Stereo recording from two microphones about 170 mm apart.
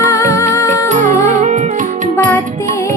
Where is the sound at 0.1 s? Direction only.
15° left (ahead or behind).